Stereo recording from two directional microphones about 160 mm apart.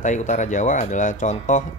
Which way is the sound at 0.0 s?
50° left (ahead or behind).